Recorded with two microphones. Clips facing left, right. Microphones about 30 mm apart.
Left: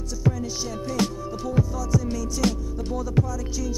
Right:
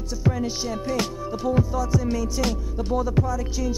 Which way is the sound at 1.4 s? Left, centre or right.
Centre.